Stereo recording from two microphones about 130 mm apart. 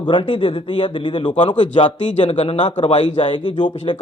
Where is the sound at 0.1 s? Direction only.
40° left (ahead or behind).